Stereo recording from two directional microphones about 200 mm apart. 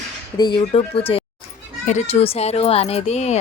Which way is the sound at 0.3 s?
25° left (ahead or behind).